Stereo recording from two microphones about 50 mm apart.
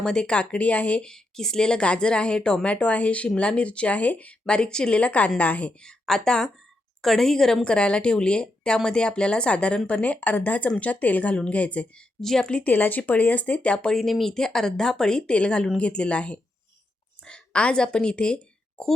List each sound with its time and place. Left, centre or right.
0.0 s speech: centre
1.0 s a woman's voice: centre; by 5.7 s left
5.8 s speech: centre
12.2 s speech: centre
12.5 s speech: left
12.7 s speech: left; by 14.0 s centre
14.0 s a woman's voice: centre